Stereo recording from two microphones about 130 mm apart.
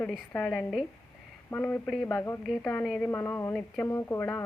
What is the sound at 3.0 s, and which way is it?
A woman's voice, 15° left (ahead or behind).